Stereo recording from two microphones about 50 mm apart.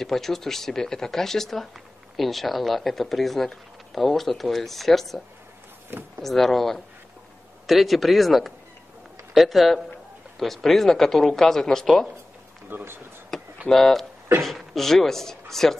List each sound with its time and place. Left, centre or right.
0.0 s speech: centre
5.9 s speech: right
6.2 s speech: centre
12.6 s speech: right
13.3 s a sound: centre
13.7 s speech: centre